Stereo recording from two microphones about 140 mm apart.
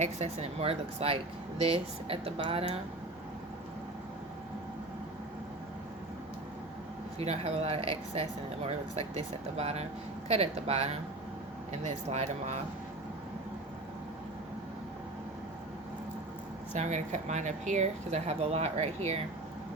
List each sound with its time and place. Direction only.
0.0 s speech: 50° right (ahead or behind)
7.2 s speech: 50° right (ahead or behind)
16.7 s speech: 55° right (ahead or behind)